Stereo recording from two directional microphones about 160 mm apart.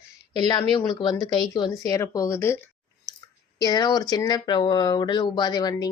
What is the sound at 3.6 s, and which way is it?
Speech, 25° left (ahead or behind).